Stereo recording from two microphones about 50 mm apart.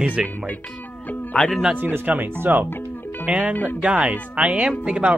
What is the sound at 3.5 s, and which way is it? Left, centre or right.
Speech, left.